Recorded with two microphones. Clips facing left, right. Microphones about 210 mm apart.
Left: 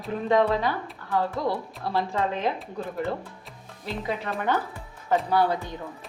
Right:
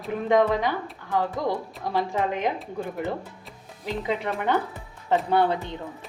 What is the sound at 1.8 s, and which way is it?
A woman's voice, 15° right (ahead or behind).